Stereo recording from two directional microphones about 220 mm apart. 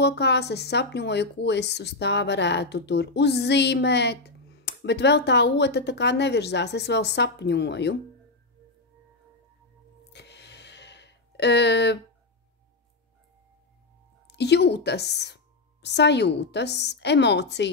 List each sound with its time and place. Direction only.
0.0 s speech: 50° left (ahead or behind)
10.1 s gasp: 50° left (ahead or behind)
14.2 s a woman's voice: 50° left (ahead or behind)